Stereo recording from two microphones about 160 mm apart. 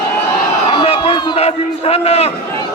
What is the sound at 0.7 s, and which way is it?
A man's voice, 35° left (ahead or behind).